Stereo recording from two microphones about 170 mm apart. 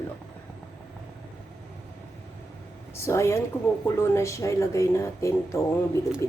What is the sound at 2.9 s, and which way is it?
Speech, 15° left (ahead or behind).